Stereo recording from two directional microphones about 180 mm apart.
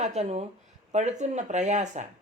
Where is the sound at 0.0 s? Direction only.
40° right (ahead or behind).